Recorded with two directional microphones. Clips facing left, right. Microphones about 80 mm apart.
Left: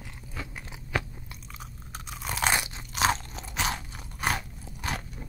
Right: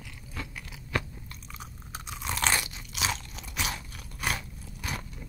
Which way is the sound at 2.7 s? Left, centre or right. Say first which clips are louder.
Left 7 dB; left.